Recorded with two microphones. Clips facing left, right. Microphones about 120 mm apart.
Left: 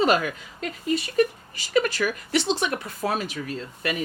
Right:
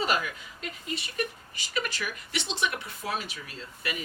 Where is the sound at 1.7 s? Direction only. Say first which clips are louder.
Left 10 dB; 80° left.